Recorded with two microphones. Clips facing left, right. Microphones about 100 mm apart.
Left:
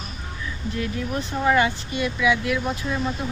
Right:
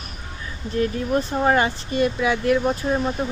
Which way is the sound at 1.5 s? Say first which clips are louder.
Left 2 dB; 35° right (ahead or behind).